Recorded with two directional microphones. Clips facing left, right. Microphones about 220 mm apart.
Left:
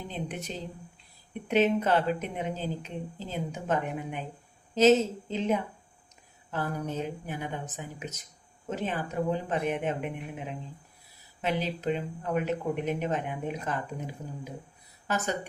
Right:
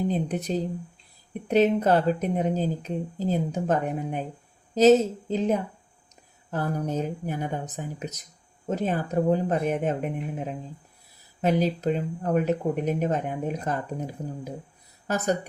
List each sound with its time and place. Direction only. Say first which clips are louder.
0.1 s speech: right 9 dB; 35° right (ahead or behind)
15.0 s speech: right 5 dB; 40° right (ahead or behind)